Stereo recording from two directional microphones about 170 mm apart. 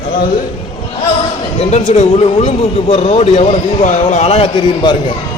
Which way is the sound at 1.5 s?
40° left (ahead or behind).